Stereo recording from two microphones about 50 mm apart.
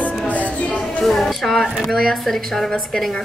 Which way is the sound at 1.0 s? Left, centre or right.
Centre.